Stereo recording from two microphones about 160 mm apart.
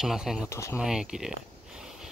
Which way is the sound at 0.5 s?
15° left (ahead or behind).